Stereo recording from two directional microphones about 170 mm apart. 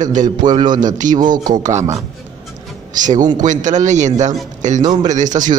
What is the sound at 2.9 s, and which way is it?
Speech, 50° right (ahead or behind).